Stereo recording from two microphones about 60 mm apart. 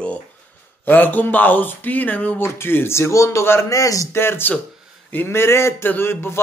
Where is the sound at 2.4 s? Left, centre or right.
Left.